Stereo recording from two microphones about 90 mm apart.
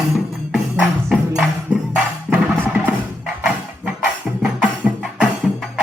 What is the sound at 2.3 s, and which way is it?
Music, 20° right (ahead or behind).